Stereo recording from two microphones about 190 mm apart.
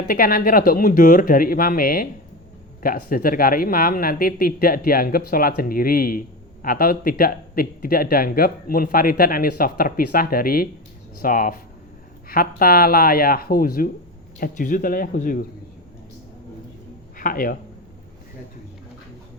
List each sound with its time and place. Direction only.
0.1 s speech: 50° left (ahead or behind)
17.2 s speech: 45° left (ahead or behind)